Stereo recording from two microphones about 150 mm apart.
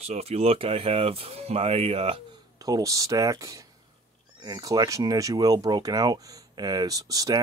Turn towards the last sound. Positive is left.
turn(degrees=-25)  # may be behind; listen again after turning